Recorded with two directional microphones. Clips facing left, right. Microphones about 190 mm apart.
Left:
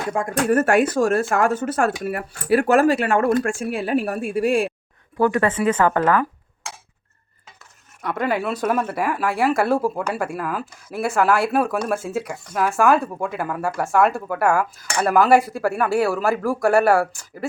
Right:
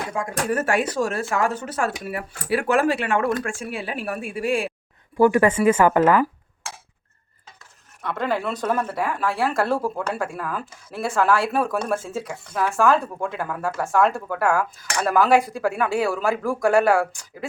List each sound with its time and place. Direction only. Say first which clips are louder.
0.1 s speech: left 7 dB; 55° left (ahead or behind)
5.1 s speech: right 2 dB; 10° right (ahead or behind)
8.0 s speech: left 2 dB; 10° left (ahead or behind)